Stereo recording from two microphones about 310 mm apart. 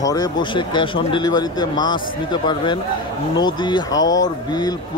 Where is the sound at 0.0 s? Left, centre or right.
Centre.